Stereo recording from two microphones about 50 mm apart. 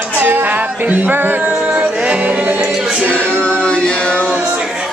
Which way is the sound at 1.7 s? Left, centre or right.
Right.